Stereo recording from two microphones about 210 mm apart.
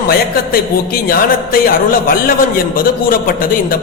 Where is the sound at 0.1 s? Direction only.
45° left (ahead or behind).